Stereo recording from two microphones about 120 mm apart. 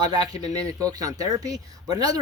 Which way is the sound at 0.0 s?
35° right (ahead or behind).